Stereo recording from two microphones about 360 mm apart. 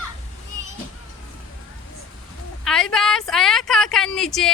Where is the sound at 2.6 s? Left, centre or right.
Centre.